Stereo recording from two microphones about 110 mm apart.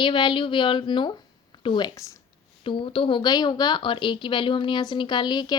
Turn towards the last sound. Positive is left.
turn(degrees=40)  # may be behind; listen again after turning